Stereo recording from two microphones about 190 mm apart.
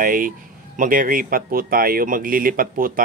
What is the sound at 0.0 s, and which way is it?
Speech, 45° right (ahead or behind).